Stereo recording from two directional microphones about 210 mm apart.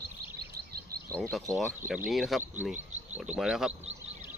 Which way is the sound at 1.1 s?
Centre (ahead or behind).